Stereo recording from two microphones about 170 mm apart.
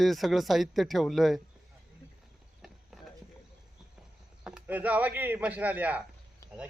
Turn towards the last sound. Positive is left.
turn(degrees=-10)  # may be behind; listen again after turning